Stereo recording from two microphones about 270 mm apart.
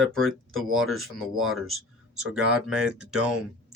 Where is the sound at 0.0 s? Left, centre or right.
Centre.